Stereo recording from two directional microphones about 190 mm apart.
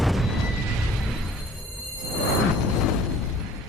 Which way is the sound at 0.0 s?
Centre (ahead or behind).